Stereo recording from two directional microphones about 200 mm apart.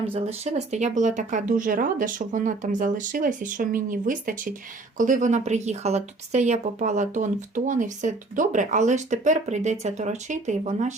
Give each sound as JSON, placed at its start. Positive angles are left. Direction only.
{"t": 0.0, "sound": "a woman's voice", "side_deg": -30}